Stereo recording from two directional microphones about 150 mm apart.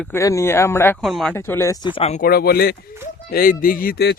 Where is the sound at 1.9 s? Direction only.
40° left (ahead or behind).